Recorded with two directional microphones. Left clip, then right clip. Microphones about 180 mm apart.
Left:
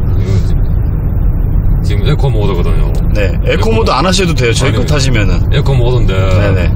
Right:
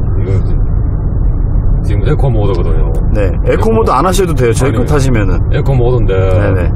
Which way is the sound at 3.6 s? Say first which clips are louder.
Right 1 dB; 15° right (ahead or behind).